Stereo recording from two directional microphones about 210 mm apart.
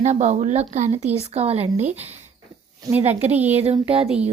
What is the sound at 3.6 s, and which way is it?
Speech, 30° right (ahead or behind).